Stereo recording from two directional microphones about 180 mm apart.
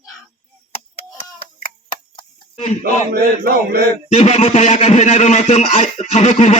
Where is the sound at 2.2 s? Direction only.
35° left (ahead or behind).